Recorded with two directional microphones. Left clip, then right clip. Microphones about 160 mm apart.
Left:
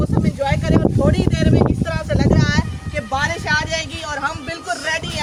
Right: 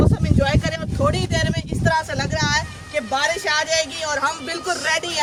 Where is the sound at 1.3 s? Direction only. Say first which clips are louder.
Left 5 dB; 65° right (ahead or behind).